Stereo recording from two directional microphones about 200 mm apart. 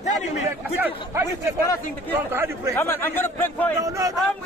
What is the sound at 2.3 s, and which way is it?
Speech, 15° right (ahead or behind).